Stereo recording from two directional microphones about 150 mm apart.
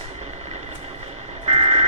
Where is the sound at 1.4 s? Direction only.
40° right (ahead or behind).